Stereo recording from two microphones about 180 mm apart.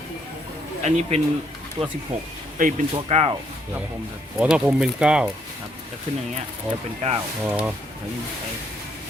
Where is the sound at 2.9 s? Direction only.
35° right (ahead or behind).